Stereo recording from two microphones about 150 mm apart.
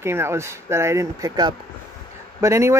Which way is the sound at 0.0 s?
15° right (ahead or behind).